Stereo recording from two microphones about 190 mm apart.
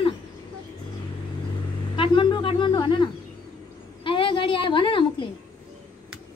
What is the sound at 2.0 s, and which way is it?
Speech, 25° left (ahead or behind).